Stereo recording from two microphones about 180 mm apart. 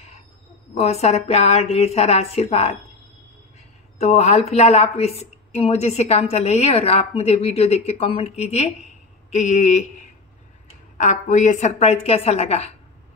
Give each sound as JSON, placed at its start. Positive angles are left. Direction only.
{"t": 0.7, "sound": "a woman's voice", "side_deg": 35}
{"t": 4.0, "sound": "a woman's voice", "side_deg": 40}
{"t": 11.0, "sound": "a woman's voice", "side_deg": 45}